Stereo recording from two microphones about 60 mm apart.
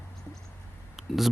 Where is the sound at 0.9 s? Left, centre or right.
Centre.